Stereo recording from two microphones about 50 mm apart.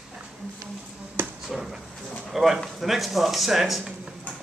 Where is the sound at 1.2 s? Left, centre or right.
Right.